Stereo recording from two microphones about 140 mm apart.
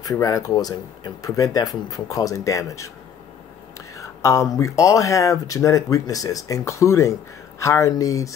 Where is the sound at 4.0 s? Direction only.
20° left (ahead or behind).